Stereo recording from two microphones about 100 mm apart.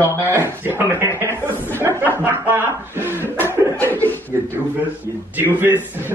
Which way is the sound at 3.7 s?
20° left (ahead or behind).